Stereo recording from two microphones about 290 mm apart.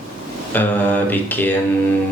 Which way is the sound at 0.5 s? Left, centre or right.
Centre.